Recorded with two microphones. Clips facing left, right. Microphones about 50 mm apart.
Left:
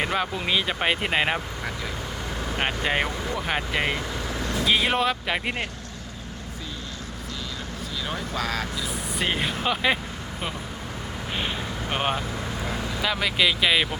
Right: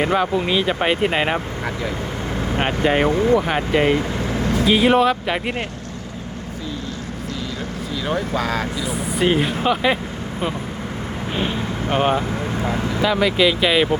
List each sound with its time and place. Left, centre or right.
0.0 s speech: centre
2.6 s speech: centre
3.1 s speech: right
3.4 s speech: centre
8.4 s speech: centre
13.0 s speech: centre